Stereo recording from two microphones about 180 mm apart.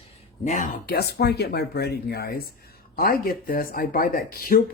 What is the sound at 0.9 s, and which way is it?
Speech, 65° left (ahead or behind).